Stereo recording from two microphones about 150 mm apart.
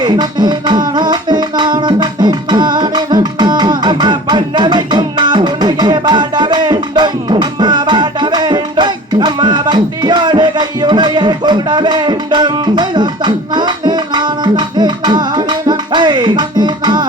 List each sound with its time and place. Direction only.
0.0 s music: 30° right (ahead or behind)